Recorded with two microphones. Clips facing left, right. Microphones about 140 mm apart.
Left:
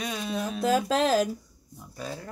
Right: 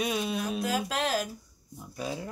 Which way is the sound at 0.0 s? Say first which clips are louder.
Right 2 dB; 10° right (ahead or behind).